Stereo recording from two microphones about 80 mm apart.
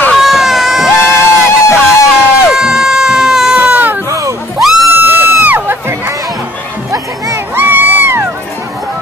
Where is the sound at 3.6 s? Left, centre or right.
Right.